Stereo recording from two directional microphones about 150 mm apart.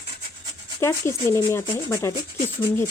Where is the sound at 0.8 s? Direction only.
20° left (ahead or behind).